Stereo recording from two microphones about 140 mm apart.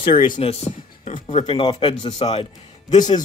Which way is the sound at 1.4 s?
35° left (ahead or behind).